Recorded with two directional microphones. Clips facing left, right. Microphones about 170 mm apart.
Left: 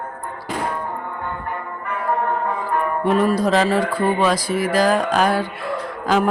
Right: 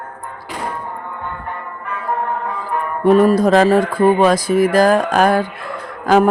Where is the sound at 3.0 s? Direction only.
45° right (ahead or behind).